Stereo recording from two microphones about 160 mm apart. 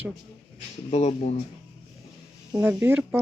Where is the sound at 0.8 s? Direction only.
45° left (ahead or behind).